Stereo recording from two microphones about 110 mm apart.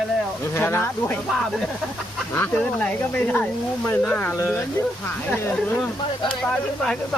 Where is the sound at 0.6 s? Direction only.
20° left (ahead or behind).